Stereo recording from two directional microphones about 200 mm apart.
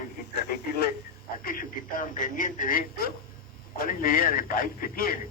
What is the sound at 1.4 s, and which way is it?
A man's voice, 45° left (ahead or behind).